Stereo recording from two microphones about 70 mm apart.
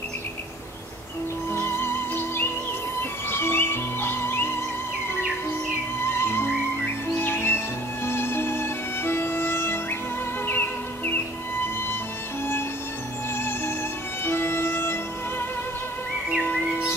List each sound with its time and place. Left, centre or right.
1.5 s music: left
5.9 s music: left
14.2 s music: left